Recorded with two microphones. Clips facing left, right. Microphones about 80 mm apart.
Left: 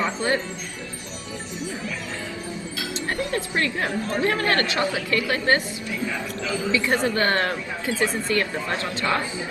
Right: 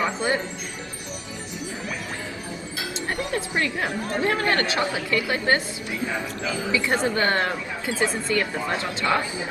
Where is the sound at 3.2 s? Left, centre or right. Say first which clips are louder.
Left 1 dB; centre.